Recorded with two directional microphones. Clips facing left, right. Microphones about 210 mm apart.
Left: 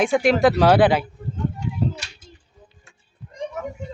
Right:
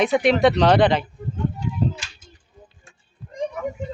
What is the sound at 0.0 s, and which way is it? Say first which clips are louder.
Speech: even; centre (ahead or behind).